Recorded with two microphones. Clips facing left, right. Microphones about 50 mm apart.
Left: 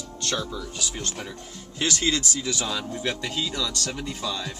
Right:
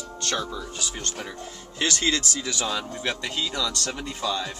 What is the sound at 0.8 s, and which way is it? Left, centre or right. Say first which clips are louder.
Speech: left 1 dB; centre.